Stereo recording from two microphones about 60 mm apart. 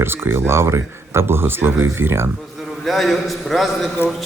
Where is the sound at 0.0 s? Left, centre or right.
Right.